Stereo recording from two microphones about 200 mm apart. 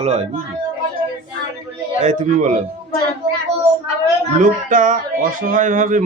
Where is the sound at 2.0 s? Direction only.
40° right (ahead or behind).